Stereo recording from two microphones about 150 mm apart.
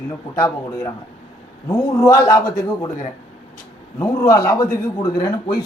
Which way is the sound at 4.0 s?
20° left (ahead or behind).